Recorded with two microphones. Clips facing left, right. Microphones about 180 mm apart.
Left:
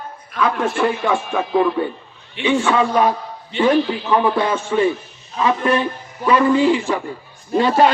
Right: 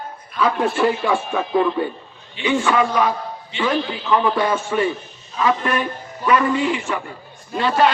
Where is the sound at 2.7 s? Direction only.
25° left (ahead or behind).